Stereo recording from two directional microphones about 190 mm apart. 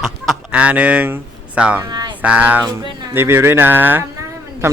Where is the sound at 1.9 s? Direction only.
20° right (ahead or behind).